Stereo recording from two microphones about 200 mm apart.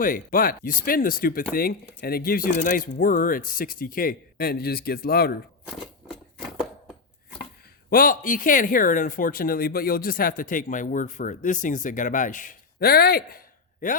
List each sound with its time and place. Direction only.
0.0 s speech: 45° left (ahead or behind)
5.6 s a sound: centre (ahead or behind)
7.9 s speech: 45° left (ahead or behind)